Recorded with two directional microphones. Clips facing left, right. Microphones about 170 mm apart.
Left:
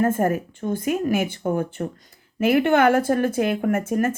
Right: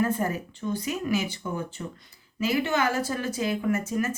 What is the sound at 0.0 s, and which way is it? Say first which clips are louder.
Speech: left 6 dB; 50° left (ahead or behind).